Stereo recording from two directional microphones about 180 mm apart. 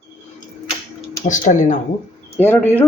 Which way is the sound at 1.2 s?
45° left (ahead or behind).